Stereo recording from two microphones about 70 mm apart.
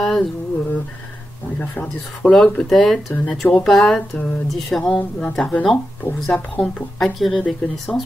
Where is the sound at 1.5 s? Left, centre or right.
Left.